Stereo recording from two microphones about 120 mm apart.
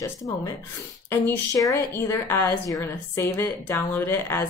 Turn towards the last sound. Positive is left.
turn(degrees=20)  # may be behind; listen again after turning